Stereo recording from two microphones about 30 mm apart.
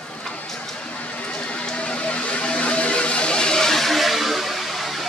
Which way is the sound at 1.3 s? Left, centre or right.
Left.